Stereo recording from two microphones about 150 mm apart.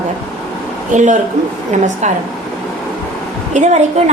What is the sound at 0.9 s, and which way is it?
A man's voice, 55° right (ahead or behind).